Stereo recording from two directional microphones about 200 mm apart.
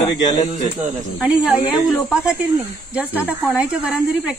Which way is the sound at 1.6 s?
20° left (ahead or behind).